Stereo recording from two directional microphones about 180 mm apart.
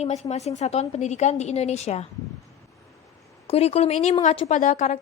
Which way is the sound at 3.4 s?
35° left (ahead or behind).